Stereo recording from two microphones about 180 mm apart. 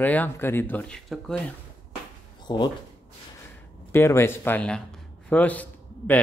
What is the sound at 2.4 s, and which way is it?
Speech, 25° left (ahead or behind).